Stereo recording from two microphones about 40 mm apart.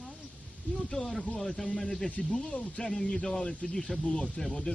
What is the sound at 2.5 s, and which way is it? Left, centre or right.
Speech, left.